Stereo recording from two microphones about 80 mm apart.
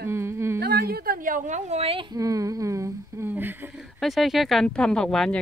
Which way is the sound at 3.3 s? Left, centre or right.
Right.